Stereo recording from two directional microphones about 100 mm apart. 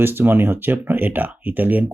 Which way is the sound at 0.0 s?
20° right (ahead or behind).